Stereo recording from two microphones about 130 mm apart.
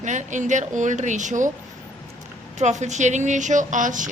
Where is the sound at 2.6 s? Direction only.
65° right (ahead or behind); by 4.1 s 80° right.